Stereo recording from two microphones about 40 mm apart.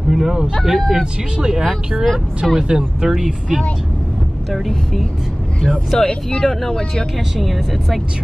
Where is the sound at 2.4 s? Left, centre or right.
Centre.